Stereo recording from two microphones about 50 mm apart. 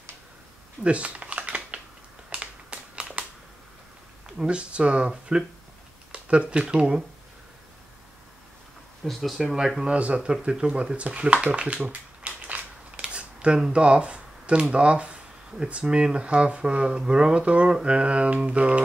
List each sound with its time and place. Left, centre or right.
0.8 s typing: right
2.2 s finger snapping: right
4.4 s speech: right
6.1 s speech: right
9.0 s speech: centre
9.8 s speech: right
11.4 s a sound: right
13.0 s camera: right
13.6 s speech: centre